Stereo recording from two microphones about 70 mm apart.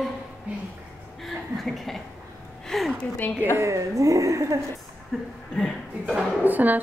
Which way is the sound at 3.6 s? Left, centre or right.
Right.